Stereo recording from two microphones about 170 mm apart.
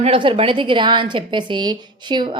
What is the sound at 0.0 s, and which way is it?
A woman's voice, 30° right (ahead or behind).